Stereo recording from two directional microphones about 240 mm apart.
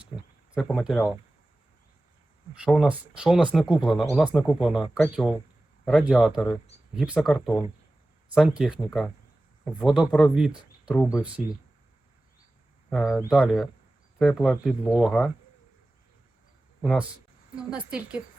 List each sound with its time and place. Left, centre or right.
0.1 s speech: left
0.5 s speech: centre
2.6 s speech: centre
13.1 s speech: centre
13.3 s speech: centre
16.8 s speech: centre